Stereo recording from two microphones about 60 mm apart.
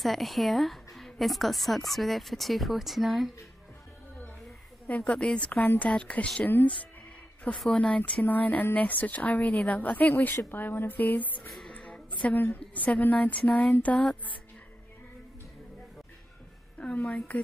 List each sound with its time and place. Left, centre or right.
0.0 s a woman's voice: centre
4.8 s a woman's voice: left
5.1 s a woman's voice: centre
7.7 s a woman's voice: left
11.7 s a sound: centre
12.4 s a woman's voice: left
16.7 s a woman's voice: left